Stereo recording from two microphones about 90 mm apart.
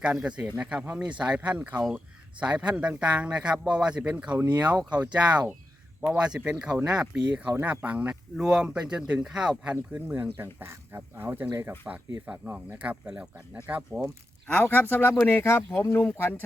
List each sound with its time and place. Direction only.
0.0 s speech: 10° right (ahead or behind)
11.9 s speech: 10° right (ahead or behind)
14.5 s speech: 20° left (ahead or behind)